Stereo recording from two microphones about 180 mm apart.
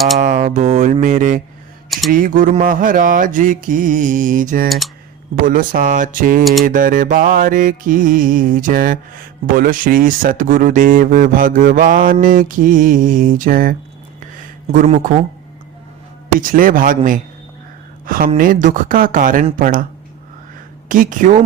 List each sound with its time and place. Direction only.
0.2 s a sound: 40° right (ahead or behind)
2.0 s music: 50° right (ahead or behind)
14.8 s speech: 35° right (ahead or behind)
16.4 s music: 50° right (ahead or behind)
18.0 s a woman's voice: 50° right (ahead or behind)
18.3 s music: 50° right (ahead or behind)
20.8 s music: 50° right (ahead or behind)